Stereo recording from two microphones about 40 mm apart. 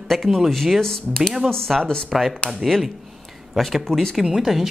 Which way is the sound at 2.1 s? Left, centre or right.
Centre.